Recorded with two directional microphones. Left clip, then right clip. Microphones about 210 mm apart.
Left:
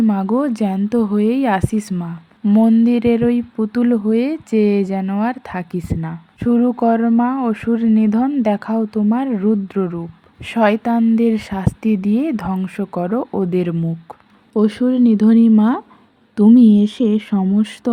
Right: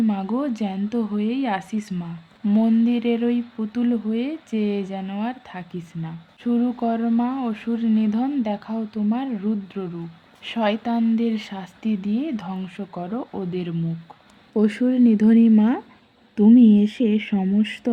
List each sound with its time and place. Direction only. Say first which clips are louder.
0.0 s speech: left 7 dB; 25° left (ahead or behind)
2.4 s speech: left 6 dB; 15° left (ahead or behind); by 13.7 s 30° left (ahead or behind)
14.5 s speech: left 4 dB; 15° left (ahead or behind)